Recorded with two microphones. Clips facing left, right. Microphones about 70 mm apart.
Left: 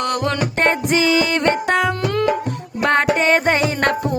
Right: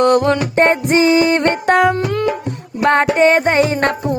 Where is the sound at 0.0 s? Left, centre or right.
Right.